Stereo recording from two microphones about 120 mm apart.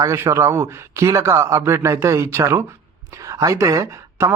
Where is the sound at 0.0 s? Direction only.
25° right (ahead or behind).